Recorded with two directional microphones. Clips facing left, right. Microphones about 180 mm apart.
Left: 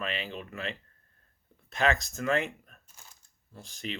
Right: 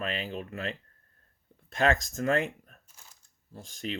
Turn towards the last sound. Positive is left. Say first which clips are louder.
# right 3 dB
turn(degrees=-40)  # may be behind; listen again after turning